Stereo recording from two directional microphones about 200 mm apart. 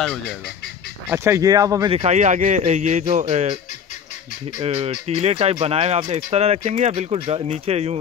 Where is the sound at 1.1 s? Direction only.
15° right (ahead or behind).